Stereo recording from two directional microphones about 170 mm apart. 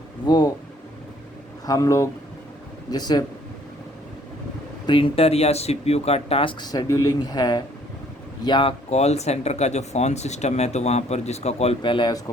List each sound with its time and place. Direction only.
0.3 s speech: 25° left (ahead or behind)
1.6 s speech: 20° left (ahead or behind)
4.9 s speech: 35° left (ahead or behind)
8.9 s speech: 40° left (ahead or behind)